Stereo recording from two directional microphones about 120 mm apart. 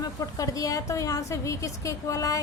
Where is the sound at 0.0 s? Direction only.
30° left (ahead or behind).